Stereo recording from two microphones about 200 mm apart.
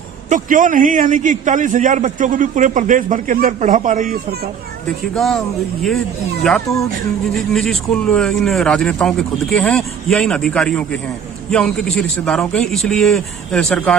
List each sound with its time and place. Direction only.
0.3 s a man's voice: 40° right (ahead or behind)
5.1 s speech: centre (ahead or behind)
6.4 s speech: centre (ahead or behind)